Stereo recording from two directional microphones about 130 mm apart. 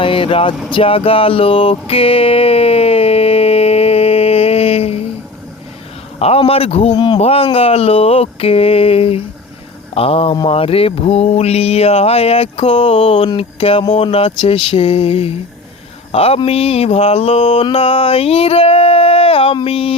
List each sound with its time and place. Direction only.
0.0 s a sound: 40° left (ahead or behind)
6.1 s mantra: 50° left (ahead or behind)
6.9 s speech: 40° left (ahead or behind)
7.2 s mantra: 50° left (ahead or behind)